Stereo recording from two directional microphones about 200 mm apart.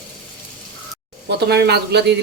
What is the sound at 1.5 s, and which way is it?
Speech, 55° right (ahead or behind).